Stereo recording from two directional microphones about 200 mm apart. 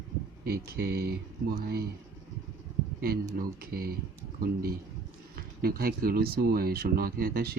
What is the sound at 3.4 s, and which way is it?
Speech, 50° right (ahead or behind).